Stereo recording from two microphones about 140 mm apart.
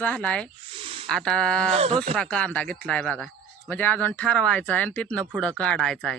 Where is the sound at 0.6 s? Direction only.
40° right (ahead or behind).